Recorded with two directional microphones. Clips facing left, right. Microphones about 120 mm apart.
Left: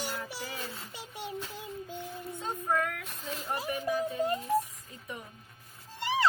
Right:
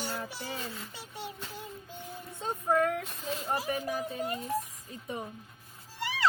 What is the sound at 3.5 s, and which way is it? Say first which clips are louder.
Speech: right 1 dB; 30° right (ahead or behind).